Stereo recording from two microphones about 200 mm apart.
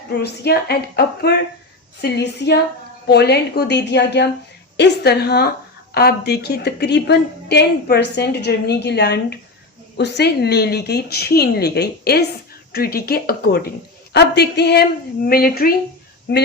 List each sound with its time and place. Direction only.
0.1 s a woman's voice: 55° left (ahead or behind)